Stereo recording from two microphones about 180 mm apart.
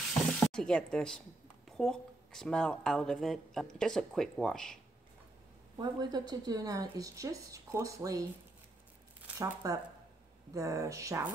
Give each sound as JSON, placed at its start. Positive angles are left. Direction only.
{"t": 0.3, "sound": "speech", "side_deg": 5}
{"t": 5.8, "sound": "a woman's voice", "side_deg": -20}
{"t": 9.4, "sound": "a woman's voice", "side_deg": -20}